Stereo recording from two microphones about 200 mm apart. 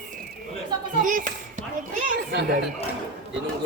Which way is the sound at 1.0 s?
40° right (ahead or behind).